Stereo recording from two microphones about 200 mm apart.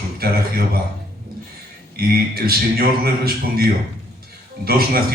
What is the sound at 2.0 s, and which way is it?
Speech, 50° right (ahead or behind).